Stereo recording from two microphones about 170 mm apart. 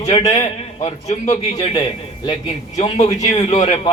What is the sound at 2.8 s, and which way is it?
Speech, 45° left (ahead or behind).